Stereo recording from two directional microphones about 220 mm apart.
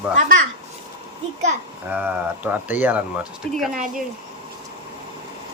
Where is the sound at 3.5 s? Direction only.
Centre (ahead or behind).